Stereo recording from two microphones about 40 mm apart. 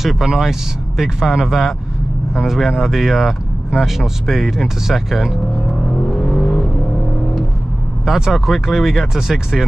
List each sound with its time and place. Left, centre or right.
0.0 s speech: centre
6.2 s vehicle: left
8.0 s speech: centre